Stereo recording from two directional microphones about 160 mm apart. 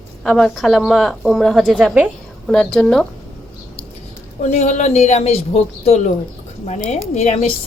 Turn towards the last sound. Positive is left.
turn(degrees=40)  # may be behind; listen again after turning